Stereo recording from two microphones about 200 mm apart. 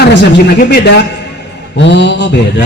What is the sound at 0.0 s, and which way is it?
A man's voice, 60° left (ahead or behind).